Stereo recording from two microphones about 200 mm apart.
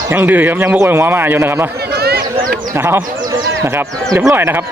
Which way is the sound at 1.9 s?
50° right (ahead or behind).